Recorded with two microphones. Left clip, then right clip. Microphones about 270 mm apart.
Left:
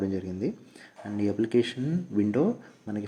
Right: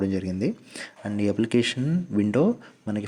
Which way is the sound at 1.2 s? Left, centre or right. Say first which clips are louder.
Right 2 dB; right.